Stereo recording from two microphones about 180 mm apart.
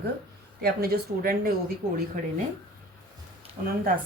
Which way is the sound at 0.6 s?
55° right (ahead or behind).